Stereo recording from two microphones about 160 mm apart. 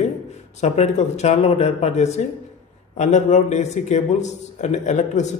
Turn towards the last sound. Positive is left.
turn(degrees=45)  # may be behind; listen again after turning